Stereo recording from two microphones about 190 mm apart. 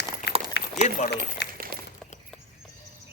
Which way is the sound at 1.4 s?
65° left (ahead or behind).